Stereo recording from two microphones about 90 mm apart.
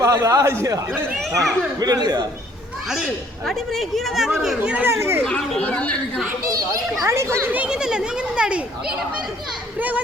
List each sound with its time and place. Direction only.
0.0 s speech: 40° right (ahead or behind)
3.4 s speech: 5° left (ahead or behind)
4.7 s speech: 25° right (ahead or behind)
5.2 s a woman's voice: 10° left (ahead or behind)
7.0 s speech: 30° right (ahead or behind)
7.5 s a child's voice: 10° right (ahead or behind)